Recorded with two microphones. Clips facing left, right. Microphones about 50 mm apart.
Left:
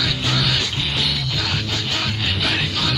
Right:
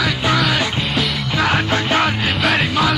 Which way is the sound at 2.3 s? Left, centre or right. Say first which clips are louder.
Right 5 dB; centre.